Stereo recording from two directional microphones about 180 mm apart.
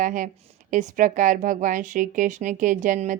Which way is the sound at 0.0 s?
45° right (ahead or behind).